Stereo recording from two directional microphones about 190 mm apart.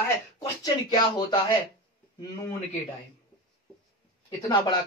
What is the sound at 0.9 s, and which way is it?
Speech, 25° left (ahead or behind).